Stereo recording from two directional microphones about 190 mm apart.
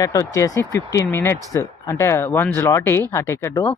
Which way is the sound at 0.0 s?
15° left (ahead or behind).